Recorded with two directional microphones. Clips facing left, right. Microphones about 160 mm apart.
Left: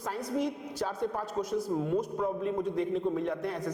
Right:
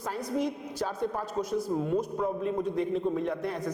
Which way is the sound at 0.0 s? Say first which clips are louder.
Right 1 dB; 10° right (ahead or behind).